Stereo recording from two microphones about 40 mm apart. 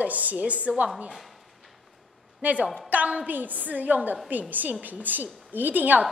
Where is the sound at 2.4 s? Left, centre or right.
Right.